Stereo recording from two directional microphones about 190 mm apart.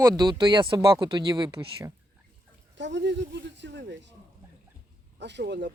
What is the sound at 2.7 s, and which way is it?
Speech, 70° right (ahead or behind).